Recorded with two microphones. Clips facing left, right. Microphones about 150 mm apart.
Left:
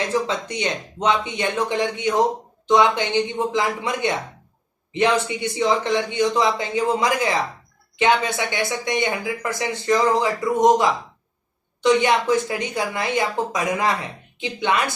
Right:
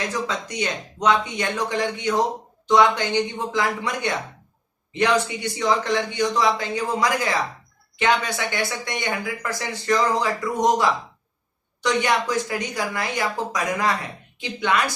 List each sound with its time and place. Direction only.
0.0 s speech: 25° left (ahead or behind)